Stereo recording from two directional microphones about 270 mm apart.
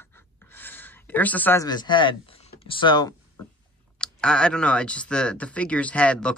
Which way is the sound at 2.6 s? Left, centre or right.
Centre.